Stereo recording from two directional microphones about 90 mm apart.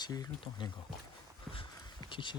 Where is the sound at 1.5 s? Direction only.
70° left (ahead or behind).